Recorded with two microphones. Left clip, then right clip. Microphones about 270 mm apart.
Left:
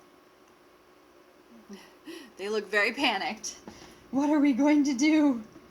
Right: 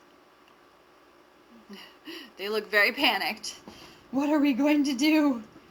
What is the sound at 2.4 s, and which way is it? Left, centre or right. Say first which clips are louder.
Speech: right 3 dB; left.